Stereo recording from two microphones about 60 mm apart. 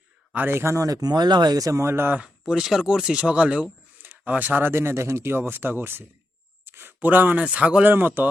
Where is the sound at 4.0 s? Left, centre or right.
Right.